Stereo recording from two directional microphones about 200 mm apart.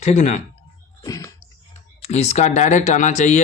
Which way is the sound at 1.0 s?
15° left (ahead or behind).